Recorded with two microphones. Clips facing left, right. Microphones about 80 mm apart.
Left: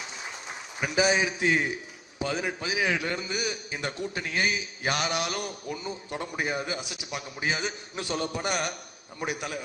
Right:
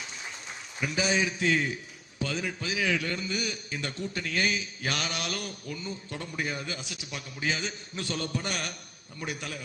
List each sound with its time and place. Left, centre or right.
0.8 s a man's voice: centre